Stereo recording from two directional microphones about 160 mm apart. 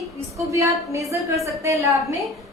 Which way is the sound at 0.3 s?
20° right (ahead or behind).